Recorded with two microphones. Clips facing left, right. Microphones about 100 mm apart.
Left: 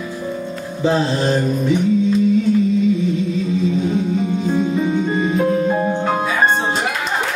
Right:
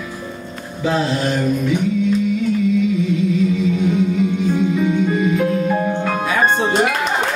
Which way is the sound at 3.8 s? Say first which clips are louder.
Right 2 dB; 30° left (ahead or behind).